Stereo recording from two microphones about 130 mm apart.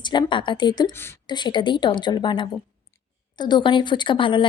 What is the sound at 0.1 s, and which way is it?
A woman's voice, 40° left (ahead or behind).